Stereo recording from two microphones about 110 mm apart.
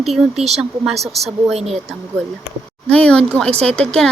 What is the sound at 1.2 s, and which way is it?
Speech, 70° right (ahead or behind).